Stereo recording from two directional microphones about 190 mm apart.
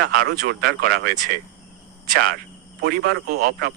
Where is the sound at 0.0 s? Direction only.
55° right (ahead or behind).